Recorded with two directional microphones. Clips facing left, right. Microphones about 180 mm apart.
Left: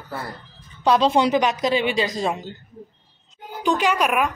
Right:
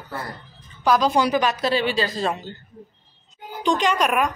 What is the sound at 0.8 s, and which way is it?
A woman's voice, 25° left (ahead or behind).